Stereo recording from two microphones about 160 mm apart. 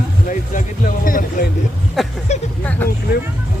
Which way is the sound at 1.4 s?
60° left (ahead or behind).